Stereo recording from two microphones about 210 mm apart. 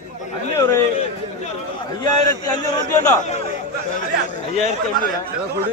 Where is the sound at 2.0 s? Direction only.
20° left (ahead or behind).